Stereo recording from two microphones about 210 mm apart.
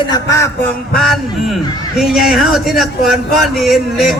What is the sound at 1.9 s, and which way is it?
Speech, centre (ahead or behind).